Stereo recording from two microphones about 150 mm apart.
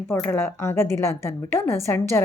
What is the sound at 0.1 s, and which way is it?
A woman's voice, 15° left (ahead or behind).